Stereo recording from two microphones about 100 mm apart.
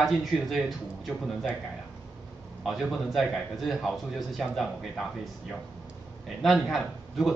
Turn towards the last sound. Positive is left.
turn(degrees=0)  # may be behind; listen again after turning